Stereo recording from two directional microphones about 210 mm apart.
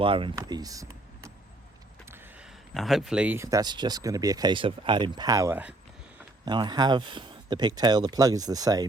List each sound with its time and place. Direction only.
0.0 s speech: 25° right (ahead or behind)
2.0 s a sound: 10° right (ahead or behind)
2.7 s speech: centre (ahead or behind)
6.4 s speech: 20° right (ahead or behind)